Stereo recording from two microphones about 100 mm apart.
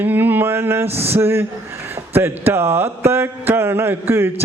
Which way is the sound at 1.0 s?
25° right (ahead or behind).